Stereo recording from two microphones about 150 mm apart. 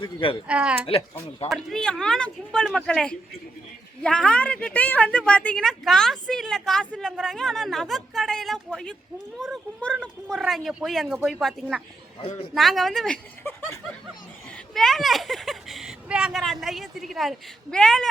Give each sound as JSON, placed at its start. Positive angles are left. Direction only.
{"t": 0.0, "sound": "speech", "side_deg": 35}
{"t": 0.4, "sound": "speech", "side_deg": -5}
{"t": 1.5, "sound": "a woman's voice", "side_deg": 5}
{"t": 12.2, "sound": "a man's voice", "side_deg": 50}
{"t": 12.5, "sound": "a woman's voice", "side_deg": 0}
{"t": 14.7, "sound": "a woman's voice", "side_deg": 0}